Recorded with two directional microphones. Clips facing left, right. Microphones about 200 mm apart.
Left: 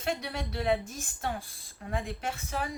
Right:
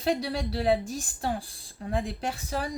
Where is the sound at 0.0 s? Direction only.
35° right (ahead or behind).